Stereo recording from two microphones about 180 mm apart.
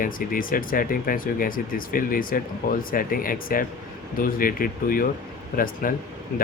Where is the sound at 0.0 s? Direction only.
50° left (ahead or behind).